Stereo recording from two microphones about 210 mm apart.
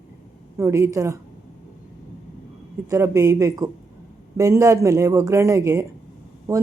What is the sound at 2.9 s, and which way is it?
Speech, 15° right (ahead or behind).